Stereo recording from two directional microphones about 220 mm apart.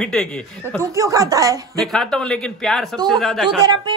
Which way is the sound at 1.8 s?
Centre (ahead or behind).